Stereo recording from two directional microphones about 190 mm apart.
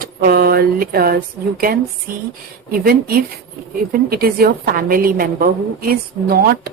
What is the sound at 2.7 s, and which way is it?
A woman's voice, 50° right (ahead or behind).